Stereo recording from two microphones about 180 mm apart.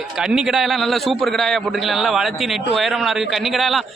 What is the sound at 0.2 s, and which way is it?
A man's voice, 5° right (ahead or behind).